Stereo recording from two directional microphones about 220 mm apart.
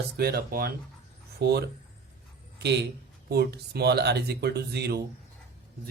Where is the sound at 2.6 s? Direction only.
50° right (ahead or behind).